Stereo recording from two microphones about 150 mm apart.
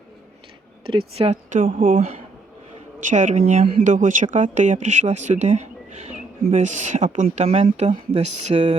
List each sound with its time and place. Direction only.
0.9 s speech: 40° right (ahead or behind); by 2.0 s 65° right (ahead or behind)
3.1 s speech: 55° right (ahead or behind)